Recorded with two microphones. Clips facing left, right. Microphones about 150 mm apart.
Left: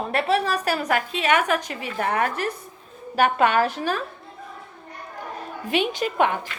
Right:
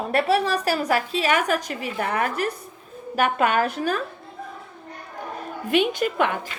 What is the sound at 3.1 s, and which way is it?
Speech, 35° left (ahead or behind).